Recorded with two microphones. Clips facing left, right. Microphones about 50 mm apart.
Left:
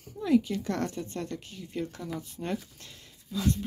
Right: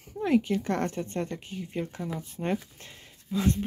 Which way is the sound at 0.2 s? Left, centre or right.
Right.